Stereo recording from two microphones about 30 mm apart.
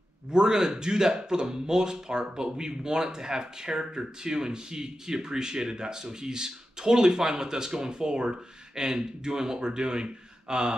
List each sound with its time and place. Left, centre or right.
0.3 s speech: right